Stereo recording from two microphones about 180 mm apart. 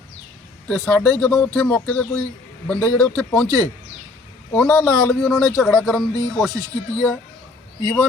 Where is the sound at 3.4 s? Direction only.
20° right (ahead or behind).